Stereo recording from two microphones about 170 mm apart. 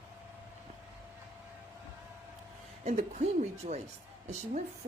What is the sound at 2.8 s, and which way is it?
A woman's voice, 45° right (ahead or behind).